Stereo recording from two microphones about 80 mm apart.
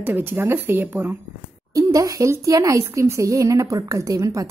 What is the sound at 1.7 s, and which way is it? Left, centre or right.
A woman's voice, right.